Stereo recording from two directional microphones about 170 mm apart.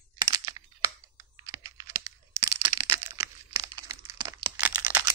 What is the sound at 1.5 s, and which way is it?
Computer keyboard, 20° right (ahead or behind).